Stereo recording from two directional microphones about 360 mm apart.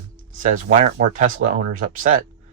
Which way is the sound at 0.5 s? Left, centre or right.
Centre.